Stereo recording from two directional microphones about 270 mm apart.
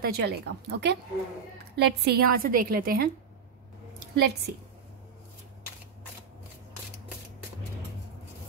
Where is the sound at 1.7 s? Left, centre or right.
Right.